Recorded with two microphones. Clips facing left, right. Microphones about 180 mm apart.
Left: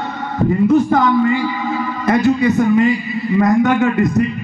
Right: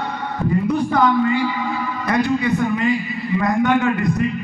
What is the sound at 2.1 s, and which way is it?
Speech, 45° left (ahead or behind).